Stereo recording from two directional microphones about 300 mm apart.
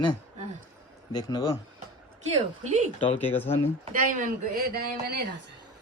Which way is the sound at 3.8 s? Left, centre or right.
Right.